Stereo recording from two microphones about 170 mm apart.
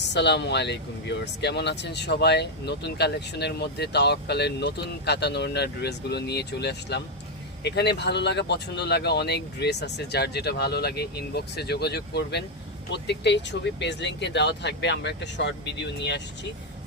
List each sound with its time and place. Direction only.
0.1 s speech: 90° left
12.9 s speech: 90° left